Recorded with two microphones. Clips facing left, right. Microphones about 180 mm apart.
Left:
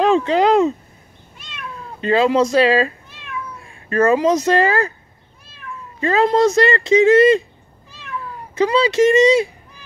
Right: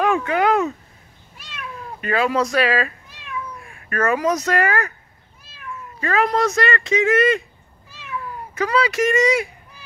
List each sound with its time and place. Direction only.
0.0 s a sound: 25° left (ahead or behind)
2.0 s speech: 25° left (ahead or behind)
5.9 s speech: 25° left (ahead or behind)
8.5 s speech: 25° left (ahead or behind)